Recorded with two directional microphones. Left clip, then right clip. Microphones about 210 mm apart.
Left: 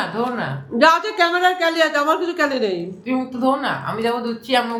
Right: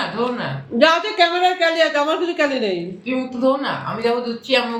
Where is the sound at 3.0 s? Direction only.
45° left (ahead or behind).